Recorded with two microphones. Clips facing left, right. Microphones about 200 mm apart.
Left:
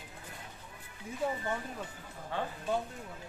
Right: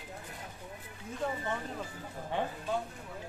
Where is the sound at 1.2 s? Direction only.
5° left (ahead or behind).